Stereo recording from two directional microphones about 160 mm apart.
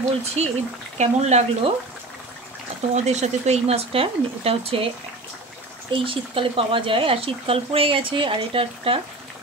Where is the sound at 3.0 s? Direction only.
45° right (ahead or behind).